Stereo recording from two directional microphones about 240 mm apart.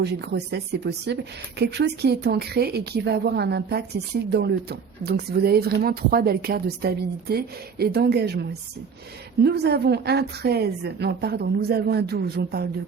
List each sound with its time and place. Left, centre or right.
0.0 s speech: right